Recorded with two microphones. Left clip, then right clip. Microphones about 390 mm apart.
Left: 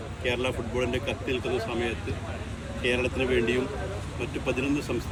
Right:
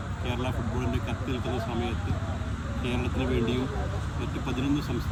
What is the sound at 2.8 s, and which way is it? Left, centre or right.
Speech, centre.